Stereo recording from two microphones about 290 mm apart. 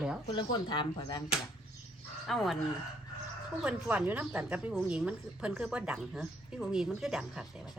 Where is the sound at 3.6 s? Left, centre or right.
Centre.